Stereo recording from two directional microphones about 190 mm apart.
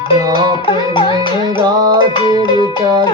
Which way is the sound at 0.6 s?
25° left (ahead or behind).